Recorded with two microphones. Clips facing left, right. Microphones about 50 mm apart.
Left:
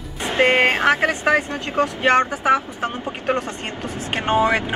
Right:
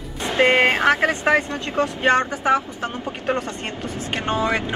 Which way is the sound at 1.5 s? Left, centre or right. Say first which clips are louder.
Left 1 dB; left.